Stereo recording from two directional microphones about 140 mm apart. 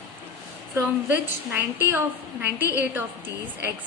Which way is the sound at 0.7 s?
15° right (ahead or behind).